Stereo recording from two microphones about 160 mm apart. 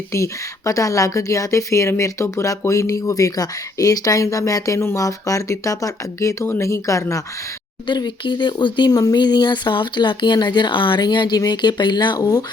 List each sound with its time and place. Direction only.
0.1 s speech: 20° left (ahead or behind)